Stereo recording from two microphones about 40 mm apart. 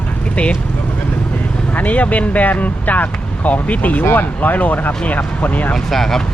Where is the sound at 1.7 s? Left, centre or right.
Left.